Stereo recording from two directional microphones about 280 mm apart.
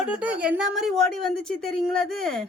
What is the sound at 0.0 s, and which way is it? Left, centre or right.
Speech, centre.